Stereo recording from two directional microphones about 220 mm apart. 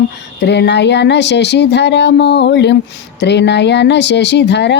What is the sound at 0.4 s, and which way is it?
Speech, 50° left (ahead or behind).